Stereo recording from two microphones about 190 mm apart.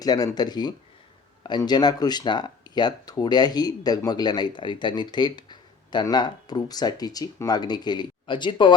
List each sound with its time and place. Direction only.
0.0 s speech: 20° left (ahead or behind)